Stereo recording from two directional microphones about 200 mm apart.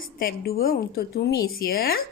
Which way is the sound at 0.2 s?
50° left (ahead or behind).